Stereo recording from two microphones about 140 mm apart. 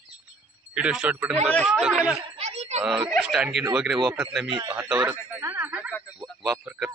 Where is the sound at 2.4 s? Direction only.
50° right (ahead or behind).